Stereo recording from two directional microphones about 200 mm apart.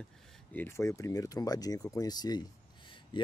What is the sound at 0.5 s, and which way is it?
Speech, 10° left (ahead or behind).